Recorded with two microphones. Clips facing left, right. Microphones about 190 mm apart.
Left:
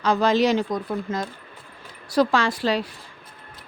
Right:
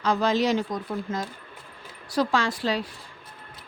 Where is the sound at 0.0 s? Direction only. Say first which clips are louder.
Left 4 dB; 80° left.